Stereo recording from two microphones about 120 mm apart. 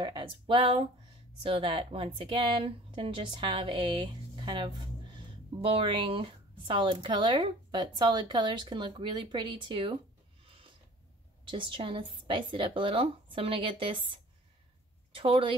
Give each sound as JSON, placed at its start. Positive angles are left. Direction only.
{"t": 0.0, "sound": "speech", "side_deg": -45}
{"t": 5.6, "sound": "speech", "side_deg": -50}
{"t": 10.4, "sound": "a sound", "side_deg": -50}
{"t": 11.4, "sound": "speech", "side_deg": -45}